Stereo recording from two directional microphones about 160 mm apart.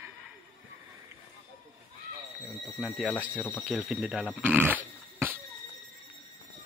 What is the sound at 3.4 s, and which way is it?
Speech, 10° left (ahead or behind).